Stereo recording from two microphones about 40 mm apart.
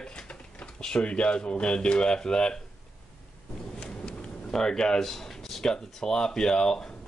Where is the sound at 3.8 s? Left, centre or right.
Left.